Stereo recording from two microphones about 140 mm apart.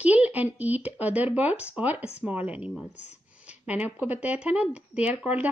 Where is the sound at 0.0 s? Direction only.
10° right (ahead or behind).